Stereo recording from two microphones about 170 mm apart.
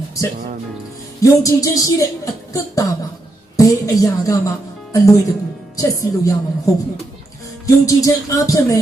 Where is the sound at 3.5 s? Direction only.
20° left (ahead or behind).